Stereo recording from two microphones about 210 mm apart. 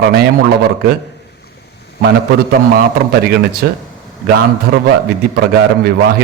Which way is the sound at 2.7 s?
50° right (ahead or behind).